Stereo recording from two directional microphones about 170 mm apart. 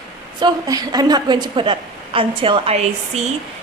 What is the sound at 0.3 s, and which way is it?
A woman's voice, 25° right (ahead or behind).